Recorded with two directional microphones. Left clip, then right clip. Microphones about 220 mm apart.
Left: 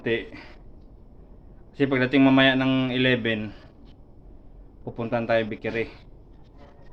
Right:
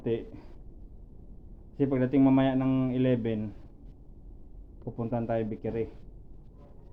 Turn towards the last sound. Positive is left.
turn(degrees=0)  # may be behind; listen again after turning